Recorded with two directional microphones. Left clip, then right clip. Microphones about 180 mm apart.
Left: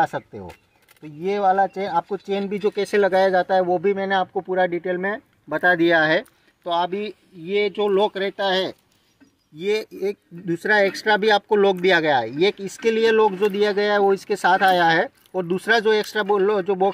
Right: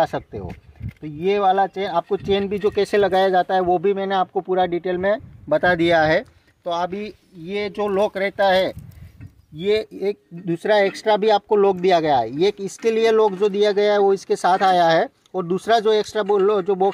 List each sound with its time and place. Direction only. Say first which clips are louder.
0.0 s speech: right 1 dB; 45° right (ahead or behind)